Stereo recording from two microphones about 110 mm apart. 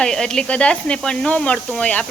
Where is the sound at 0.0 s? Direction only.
5° left (ahead or behind).